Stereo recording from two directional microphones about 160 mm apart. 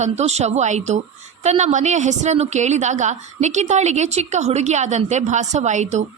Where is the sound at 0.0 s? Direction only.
45° right (ahead or behind).